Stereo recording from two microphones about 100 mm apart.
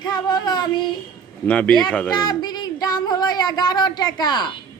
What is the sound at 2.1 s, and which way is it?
Speech, 45° left (ahead or behind).